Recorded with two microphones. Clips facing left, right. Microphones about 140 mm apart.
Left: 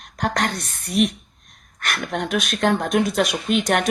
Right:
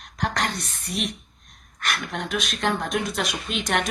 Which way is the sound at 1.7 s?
50° left (ahead or behind).